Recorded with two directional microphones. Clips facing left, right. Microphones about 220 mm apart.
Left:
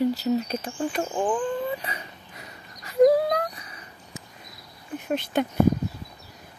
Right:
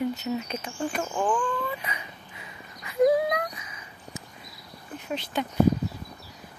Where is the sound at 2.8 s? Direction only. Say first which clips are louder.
Left 3 dB; 40° left (ahead or behind).